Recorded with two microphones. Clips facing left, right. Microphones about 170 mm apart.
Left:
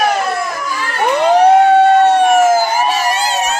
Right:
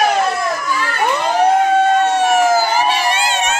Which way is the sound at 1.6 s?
65° left (ahead or behind).